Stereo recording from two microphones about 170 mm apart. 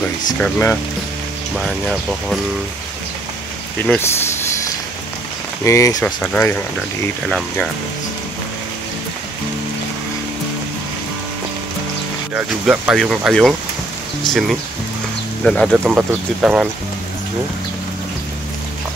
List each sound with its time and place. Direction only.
0.4 s speech: 10° left (ahead or behind)
1.6 s speech: centre (ahead or behind)
3.8 s speech: 10° left (ahead or behind)
5.6 s speech: 15° left (ahead or behind)
6.0 s speech: 5° left (ahead or behind)
12.4 s speech: 5° right (ahead or behind)
15.4 s speech: 5° left (ahead or behind)
15.8 s speech: 10° right (ahead or behind)